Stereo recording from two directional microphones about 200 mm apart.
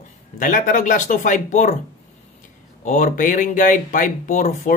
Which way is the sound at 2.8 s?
40° left (ahead or behind).